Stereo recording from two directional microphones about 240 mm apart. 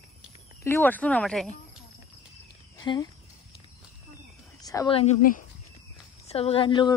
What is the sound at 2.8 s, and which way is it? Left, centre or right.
Speech, centre.